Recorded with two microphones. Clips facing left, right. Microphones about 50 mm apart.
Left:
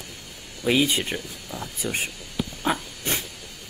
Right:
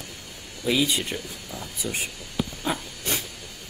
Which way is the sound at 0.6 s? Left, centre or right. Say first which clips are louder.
Left 2 dB; left.